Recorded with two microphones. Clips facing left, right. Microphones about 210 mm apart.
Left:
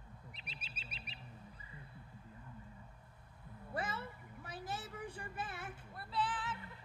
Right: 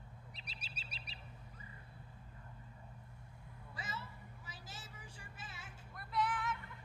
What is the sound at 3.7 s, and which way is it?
Vehicle, 60° left (ahead or behind).